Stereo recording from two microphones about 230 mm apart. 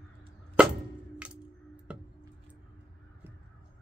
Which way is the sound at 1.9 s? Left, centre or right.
Centre.